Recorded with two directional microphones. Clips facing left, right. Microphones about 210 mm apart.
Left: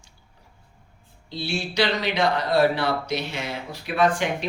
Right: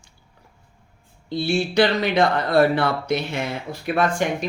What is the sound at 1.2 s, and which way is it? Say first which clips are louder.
Speech: right 7 dB; 50° right (ahead or behind).